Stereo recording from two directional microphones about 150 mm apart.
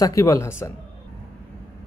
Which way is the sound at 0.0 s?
20° left (ahead or behind).